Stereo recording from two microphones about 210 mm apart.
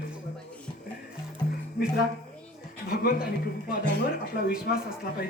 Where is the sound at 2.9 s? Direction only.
45° left (ahead or behind).